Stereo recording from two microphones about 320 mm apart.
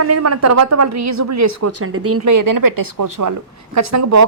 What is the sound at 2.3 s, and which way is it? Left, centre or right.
Speech, right.